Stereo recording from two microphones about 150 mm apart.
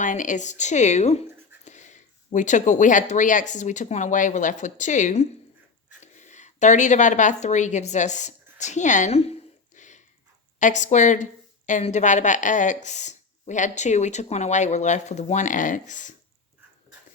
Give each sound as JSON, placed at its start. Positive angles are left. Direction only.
{"t": 0.0, "sound": "speech", "side_deg": 60}
{"t": 9.7, "sound": "a sound", "side_deg": 55}
{"t": 10.6, "sound": "speech", "side_deg": 55}